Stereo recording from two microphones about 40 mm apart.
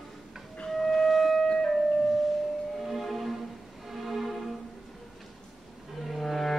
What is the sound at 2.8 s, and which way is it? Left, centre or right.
Music, centre.